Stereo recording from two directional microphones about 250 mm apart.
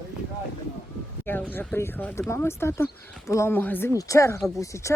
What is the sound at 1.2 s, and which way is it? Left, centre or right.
Speech, centre.